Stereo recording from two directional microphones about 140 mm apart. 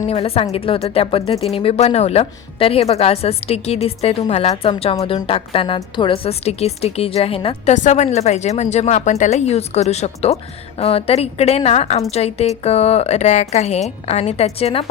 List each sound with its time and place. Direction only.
0.1 s speech: 45° left (ahead or behind)
7.7 s speech: 60° left (ahead or behind)